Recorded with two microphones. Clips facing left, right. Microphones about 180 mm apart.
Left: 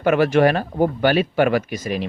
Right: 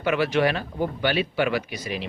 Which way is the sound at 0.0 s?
45° left (ahead or behind).